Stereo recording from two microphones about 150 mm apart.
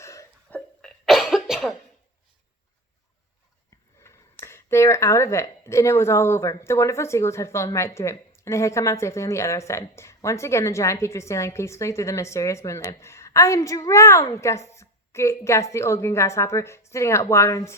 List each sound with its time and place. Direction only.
0.0 s a sound: 20° left (ahead or behind)
0.8 s cough: centre (ahead or behind)
4.0 s speech: 20° left (ahead or behind)